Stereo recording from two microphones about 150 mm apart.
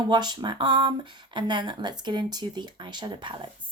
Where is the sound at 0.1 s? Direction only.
30° right (ahead or behind).